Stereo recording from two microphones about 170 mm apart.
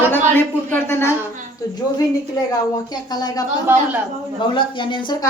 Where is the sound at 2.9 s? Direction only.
25° left (ahead or behind).